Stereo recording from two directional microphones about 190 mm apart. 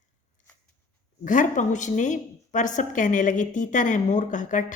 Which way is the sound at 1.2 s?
45° left (ahead or behind).